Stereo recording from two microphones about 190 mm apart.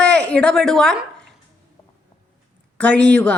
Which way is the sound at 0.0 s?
5° left (ahead or behind).